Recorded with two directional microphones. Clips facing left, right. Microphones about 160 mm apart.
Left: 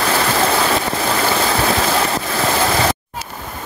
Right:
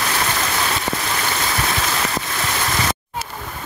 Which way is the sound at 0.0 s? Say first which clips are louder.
Left 6 dB; 60° left (ahead or behind).